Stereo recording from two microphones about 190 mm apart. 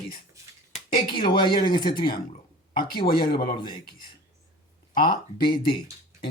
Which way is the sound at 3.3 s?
50° left (ahead or behind).